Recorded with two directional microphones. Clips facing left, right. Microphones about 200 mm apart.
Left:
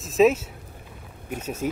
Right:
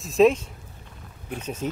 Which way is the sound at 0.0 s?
Centre (ahead or behind).